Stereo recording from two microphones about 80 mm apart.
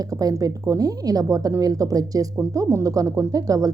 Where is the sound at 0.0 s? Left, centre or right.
Right.